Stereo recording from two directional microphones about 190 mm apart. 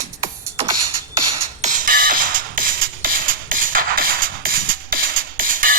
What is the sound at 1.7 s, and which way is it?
Music, 45° right (ahead or behind).